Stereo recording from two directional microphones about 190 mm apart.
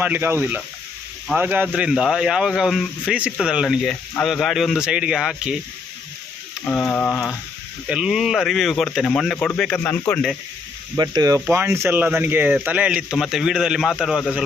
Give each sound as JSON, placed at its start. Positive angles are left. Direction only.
{"t": 0.0, "sound": "speech", "side_deg": -10}
{"t": 6.7, "sound": "a sound", "side_deg": 5}
{"t": 7.9, "sound": "speech", "side_deg": -5}
{"t": 10.9, "sound": "speech", "side_deg": -20}